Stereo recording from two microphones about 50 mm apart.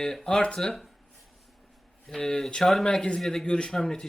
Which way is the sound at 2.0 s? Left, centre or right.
Centre.